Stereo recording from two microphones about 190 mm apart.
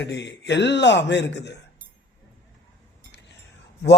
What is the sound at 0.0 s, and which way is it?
Speech, 65° left (ahead or behind).